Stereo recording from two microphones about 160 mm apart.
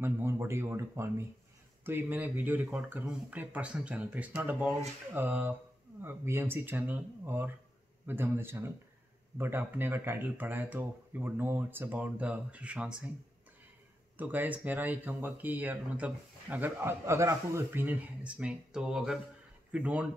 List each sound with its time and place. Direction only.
0.0 s speech: 15° right (ahead or behind)
14.1 s speech: 10° right (ahead or behind)